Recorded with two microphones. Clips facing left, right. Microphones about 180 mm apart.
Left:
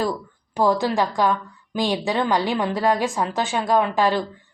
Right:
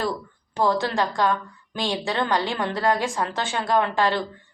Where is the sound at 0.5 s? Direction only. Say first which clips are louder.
Left 3 dB; 15° left (ahead or behind).